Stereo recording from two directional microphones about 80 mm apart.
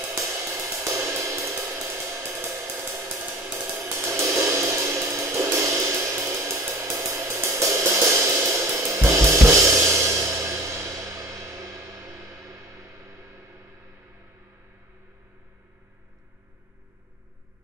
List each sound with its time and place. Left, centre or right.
0.0 s music: right
2.9 s hi-hat: right
3.6 s music: right